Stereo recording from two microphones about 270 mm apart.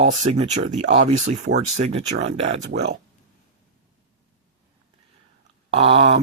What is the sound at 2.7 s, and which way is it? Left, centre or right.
Speech, right.